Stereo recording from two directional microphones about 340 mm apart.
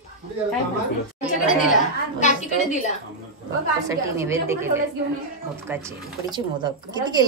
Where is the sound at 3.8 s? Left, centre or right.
Centre.